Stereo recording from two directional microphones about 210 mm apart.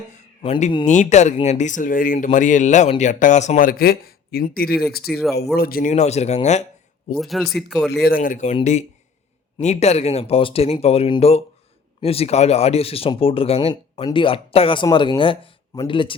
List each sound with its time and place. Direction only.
0.1 s speech: 30° left (ahead or behind)
0.9 s speech: 35° left (ahead or behind)
7.2 s speech: centre (ahead or behind)
7.9 s speech: 50° left (ahead or behind); by 16.1 s 25° left (ahead or behind)